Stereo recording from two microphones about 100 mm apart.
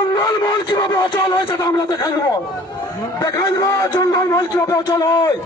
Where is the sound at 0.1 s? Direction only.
40° left (ahead or behind).